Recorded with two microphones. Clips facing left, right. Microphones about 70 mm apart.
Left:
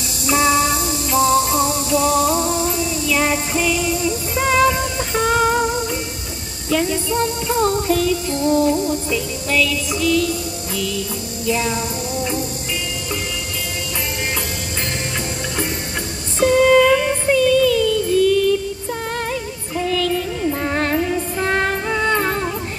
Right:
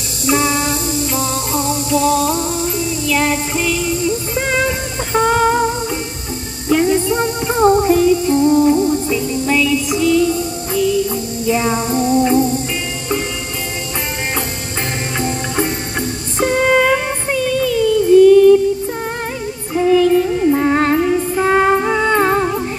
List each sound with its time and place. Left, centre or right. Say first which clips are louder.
0.3 s music: even; centre
6.7 s music: right 5 dB; right
15.1 s music: right 9 dB; centre
19.7 s music: right 8 dB; right